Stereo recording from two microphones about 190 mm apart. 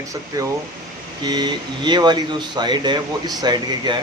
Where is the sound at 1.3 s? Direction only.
25° right (ahead or behind).